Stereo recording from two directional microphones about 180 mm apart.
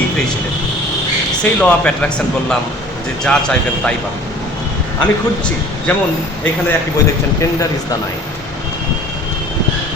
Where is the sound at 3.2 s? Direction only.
5° left (ahead or behind).